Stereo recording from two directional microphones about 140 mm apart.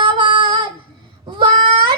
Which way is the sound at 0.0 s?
35° right (ahead or behind).